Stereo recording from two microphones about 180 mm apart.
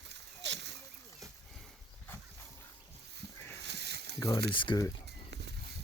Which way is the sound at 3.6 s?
70° right (ahead or behind).